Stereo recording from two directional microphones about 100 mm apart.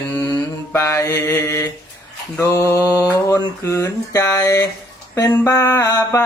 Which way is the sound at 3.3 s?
30° left (ahead or behind).